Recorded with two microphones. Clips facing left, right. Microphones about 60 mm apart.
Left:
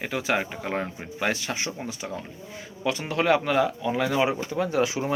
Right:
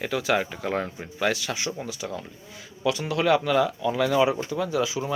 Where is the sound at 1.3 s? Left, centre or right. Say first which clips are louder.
Right 1 dB; left.